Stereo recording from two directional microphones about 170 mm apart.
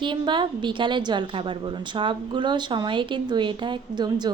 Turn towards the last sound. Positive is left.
turn(degrees=-25)  # may be behind; listen again after turning